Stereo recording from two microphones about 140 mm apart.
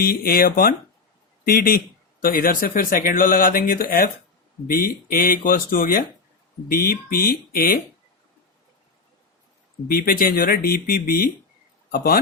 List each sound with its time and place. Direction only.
0.0 s speech: 90° left
9.9 s speech: 90° left